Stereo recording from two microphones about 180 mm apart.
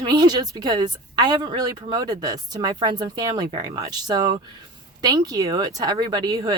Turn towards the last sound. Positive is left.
turn(degrees=-20)  # may be behind; listen again after turning